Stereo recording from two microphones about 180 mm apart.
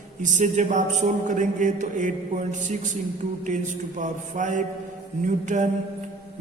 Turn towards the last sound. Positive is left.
turn(degrees=-45)  # may be behind; listen again after turning